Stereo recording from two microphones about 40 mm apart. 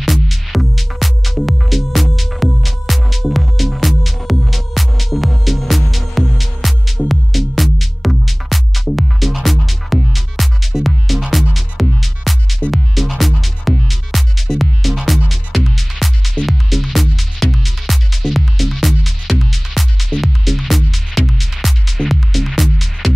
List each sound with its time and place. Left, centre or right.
0.0 s music: centre